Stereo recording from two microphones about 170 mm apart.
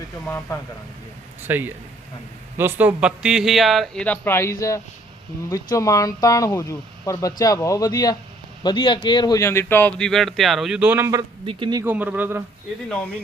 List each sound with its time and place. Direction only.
0.3 s speech: 15° left (ahead or behind)
1.4 s speech: 10° right (ahead or behind)
11.4 s speech: 30° right (ahead or behind)
11.8 s speech: 10° right (ahead or behind)